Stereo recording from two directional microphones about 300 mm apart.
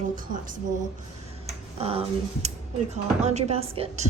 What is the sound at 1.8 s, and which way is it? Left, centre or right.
Speech, centre.